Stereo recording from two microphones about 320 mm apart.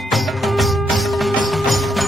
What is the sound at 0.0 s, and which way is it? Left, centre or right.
Music, centre.